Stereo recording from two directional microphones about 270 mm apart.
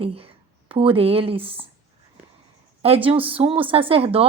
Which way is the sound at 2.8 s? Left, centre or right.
Right.